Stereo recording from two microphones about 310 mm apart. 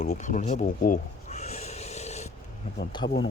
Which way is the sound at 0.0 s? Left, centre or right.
Left.